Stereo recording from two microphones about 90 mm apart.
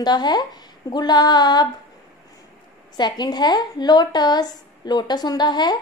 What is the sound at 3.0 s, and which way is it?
A woman's voice, 50° left (ahead or behind).